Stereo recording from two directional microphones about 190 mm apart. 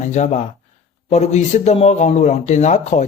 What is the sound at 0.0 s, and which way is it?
A man's voice, 40° left (ahead or behind).